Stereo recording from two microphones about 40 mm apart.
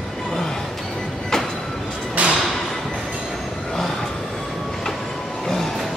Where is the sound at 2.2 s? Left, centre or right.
Right.